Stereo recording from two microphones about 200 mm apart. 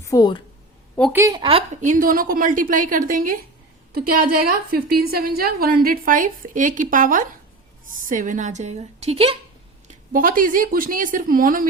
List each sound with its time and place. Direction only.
0.0 s speech: 20° left (ahead or behind)
1.1 s a woman's voice: 15° right (ahead or behind)
10.1 s a woman's voice: 45° right (ahead or behind)